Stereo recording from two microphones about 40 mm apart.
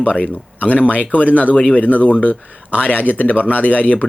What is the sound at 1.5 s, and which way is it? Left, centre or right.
Speech, left.